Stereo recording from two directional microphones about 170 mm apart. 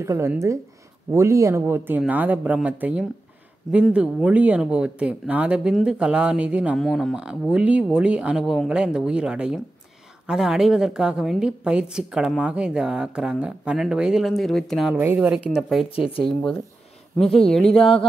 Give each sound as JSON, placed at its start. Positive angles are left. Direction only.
{"t": 0.0, "sound": "speech", "side_deg": -15}
{"t": 15.0, "sound": "speech", "side_deg": -10}
{"t": 17.2, "sound": "speech", "side_deg": 5}
{"t": 17.7, "sound": "speech", "side_deg": 35}